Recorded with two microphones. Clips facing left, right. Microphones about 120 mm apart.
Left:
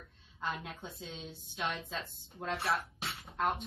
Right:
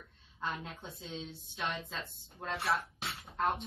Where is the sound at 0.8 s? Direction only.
Centre (ahead or behind).